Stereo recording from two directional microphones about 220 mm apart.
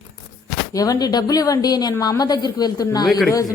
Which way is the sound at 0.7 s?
15° left (ahead or behind).